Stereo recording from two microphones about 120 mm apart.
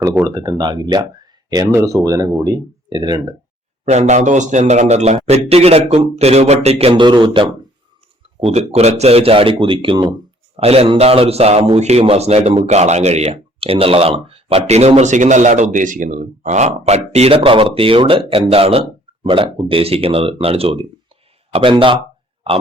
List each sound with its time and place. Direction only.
0.3 s speech: 30° right (ahead or behind)
3.8 s speech: 70° right (ahead or behind); by 7.0 s 55° right (ahead or behind)
7.0 s speech: 40° right (ahead or behind)
8.4 s speech: 60° right (ahead or behind); by 10.2 s 40° right (ahead or behind)
10.6 s speech: 55° right (ahead or behind)